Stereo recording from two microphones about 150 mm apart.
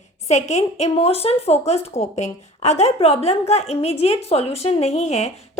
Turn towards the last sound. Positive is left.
turn(degrees=45)  # may be behind; listen again after turning